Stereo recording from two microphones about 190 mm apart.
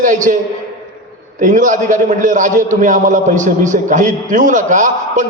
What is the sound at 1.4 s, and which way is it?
A man's voice, 40° right (ahead or behind).